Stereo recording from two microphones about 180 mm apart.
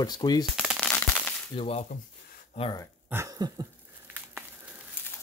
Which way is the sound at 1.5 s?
35° left (ahead or behind).